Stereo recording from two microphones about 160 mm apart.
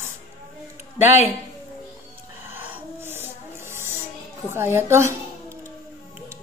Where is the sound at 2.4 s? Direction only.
10° right (ahead or behind).